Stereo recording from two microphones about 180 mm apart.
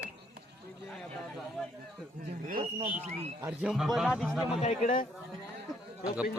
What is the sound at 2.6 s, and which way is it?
Speech, 40° right (ahead or behind).